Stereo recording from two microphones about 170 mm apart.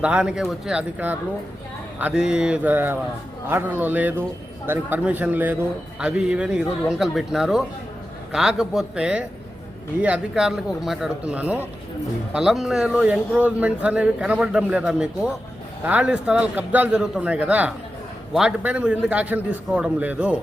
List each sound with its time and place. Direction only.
0.0 s a man's voice: 5° right (ahead or behind)